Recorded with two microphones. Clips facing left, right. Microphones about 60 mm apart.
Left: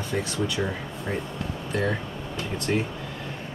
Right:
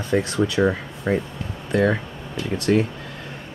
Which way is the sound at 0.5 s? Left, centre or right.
Right.